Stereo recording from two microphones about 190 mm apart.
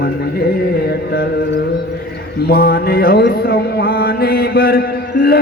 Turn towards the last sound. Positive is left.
turn(degrees=55)  # may be behind; listen again after turning